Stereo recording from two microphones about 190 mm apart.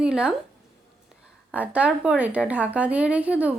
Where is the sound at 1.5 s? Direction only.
5° right (ahead or behind).